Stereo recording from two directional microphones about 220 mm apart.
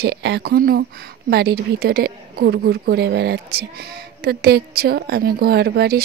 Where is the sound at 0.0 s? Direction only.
50° right (ahead or behind).